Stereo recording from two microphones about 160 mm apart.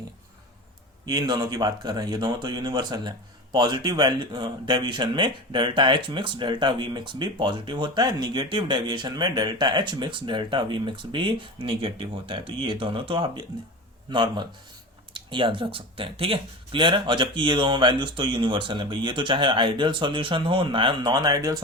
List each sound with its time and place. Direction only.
1.0 s speech: 25° right (ahead or behind)